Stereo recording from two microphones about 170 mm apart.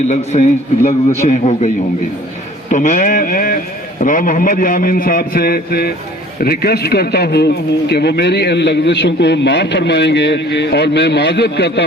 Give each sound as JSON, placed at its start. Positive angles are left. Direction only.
{"t": 0.1, "sound": "a man's voice", "side_deg": 40}